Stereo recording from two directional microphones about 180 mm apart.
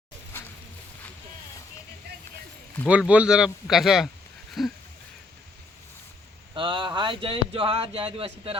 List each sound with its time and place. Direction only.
2.8 s a man's voice: 5° right (ahead or behind)
6.5 s speech: 25° right (ahead or behind)